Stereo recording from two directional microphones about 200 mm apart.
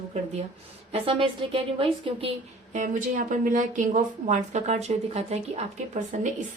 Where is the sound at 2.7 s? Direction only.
40° right (ahead or behind).